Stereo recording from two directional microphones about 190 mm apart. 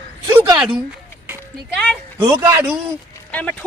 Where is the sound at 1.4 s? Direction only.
5° left (ahead or behind).